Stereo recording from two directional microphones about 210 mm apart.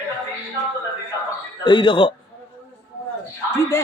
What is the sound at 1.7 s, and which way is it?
Speech, 25° left (ahead or behind).